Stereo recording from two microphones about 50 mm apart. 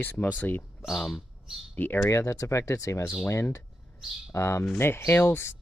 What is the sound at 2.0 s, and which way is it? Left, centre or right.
Speech, left.